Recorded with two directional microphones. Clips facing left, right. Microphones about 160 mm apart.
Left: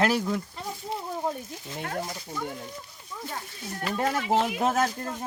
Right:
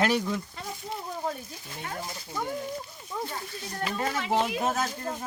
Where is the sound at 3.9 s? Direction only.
50° left (ahead or behind).